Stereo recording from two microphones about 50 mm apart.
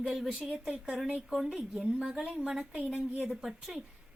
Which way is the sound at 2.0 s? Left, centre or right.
Centre.